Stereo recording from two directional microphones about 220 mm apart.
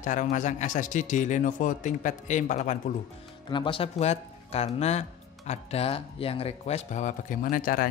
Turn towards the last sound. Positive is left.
turn(degrees=40)  # may be behind; listen again after turning